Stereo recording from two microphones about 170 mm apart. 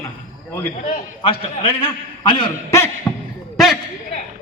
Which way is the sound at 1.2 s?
30° left (ahead or behind).